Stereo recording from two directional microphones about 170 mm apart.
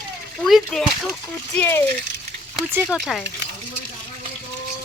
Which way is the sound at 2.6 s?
Centre (ahead or behind).